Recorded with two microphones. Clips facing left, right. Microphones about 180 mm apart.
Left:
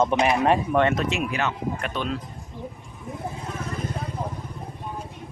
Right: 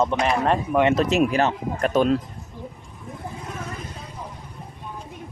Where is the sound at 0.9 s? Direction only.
40° right (ahead or behind).